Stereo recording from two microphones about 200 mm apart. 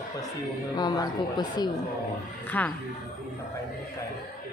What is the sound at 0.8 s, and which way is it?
Speech, 20° left (ahead or behind).